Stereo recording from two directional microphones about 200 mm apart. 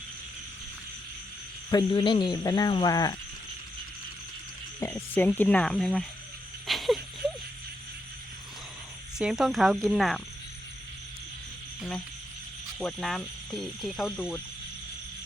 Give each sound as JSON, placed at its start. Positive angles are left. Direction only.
{"t": 1.7, "sound": "speech", "side_deg": 20}
{"t": 4.8, "sound": "speech", "side_deg": 10}
{"t": 6.7, "sound": "a sound", "side_deg": 0}
{"t": 9.1, "sound": "speech", "side_deg": 0}
{"t": 11.8, "sound": "speech", "side_deg": 5}